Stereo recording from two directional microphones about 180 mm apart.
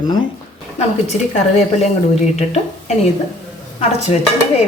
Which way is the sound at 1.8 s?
40° left (ahead or behind).